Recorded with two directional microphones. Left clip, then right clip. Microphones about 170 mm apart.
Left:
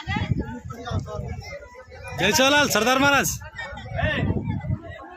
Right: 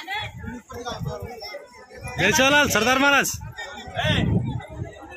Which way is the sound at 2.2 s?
Centre (ahead or behind).